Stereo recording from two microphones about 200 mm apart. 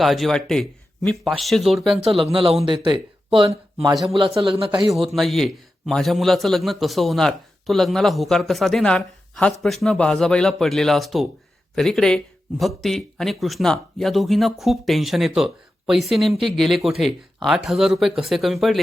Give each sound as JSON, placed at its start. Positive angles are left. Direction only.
{"t": 0.0, "sound": "a man's voice", "side_deg": 0}
{"t": 2.3, "sound": "speech", "side_deg": -30}
{"t": 3.9, "sound": "a man's voice", "side_deg": 0}
{"t": 4.4, "sound": "speech", "side_deg": -25}
{"t": 4.9, "sound": "a man's voice", "side_deg": 0}